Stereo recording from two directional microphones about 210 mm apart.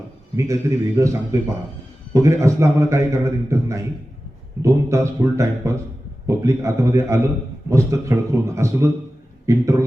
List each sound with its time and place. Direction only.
0.3 s a man's voice: 15° right (ahead or behind)